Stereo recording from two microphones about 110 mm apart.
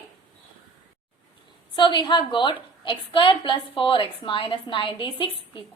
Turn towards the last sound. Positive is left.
turn(degrees=50)  # may be behind; listen again after turning